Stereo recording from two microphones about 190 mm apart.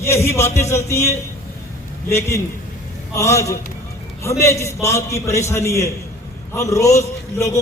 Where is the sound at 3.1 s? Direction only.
15° left (ahead or behind).